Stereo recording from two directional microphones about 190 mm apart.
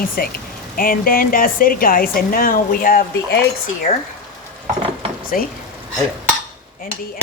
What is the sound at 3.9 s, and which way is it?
Speech, 30° left (ahead or behind).